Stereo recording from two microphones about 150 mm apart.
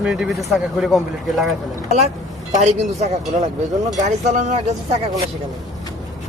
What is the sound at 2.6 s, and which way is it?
Speech, 50° right (ahead or behind).